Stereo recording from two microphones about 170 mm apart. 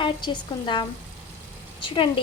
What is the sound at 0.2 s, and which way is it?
Speech, 25° left (ahead or behind).